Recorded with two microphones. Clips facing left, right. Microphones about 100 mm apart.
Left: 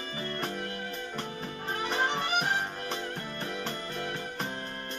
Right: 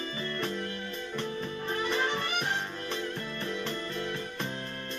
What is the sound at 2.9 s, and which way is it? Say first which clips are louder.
Keyboard: right 1 dB; 40° left (ahead or behind).